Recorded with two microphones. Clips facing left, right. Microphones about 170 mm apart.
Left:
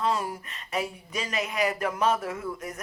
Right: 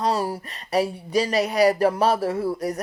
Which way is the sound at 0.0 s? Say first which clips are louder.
Right 4 dB; 35° right (ahead or behind).